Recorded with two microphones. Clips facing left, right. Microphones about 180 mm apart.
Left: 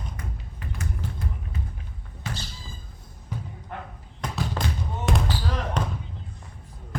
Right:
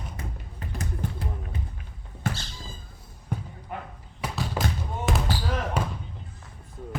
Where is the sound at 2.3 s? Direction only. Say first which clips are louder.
Right 5 dB; 50° right (ahead or behind).